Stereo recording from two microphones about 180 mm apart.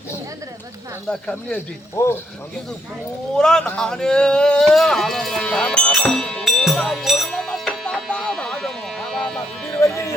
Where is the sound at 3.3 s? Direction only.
5° left (ahead or behind).